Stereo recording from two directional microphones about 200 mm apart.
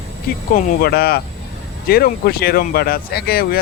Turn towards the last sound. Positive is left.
turn(degrees=50)  # may be behind; listen again after turning